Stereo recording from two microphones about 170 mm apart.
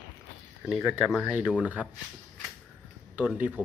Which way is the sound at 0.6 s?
5° right (ahead or behind).